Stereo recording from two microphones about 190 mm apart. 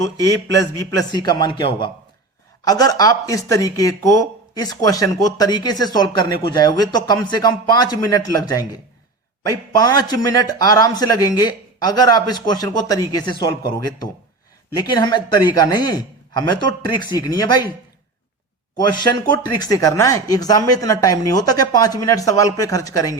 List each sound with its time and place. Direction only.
0.0 s a man's voice: 15° left (ahead or behind)
19.5 s speech: 20° left (ahead or behind)